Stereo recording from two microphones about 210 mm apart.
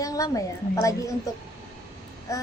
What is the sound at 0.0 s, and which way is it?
A woman's voice, 15° left (ahead or behind).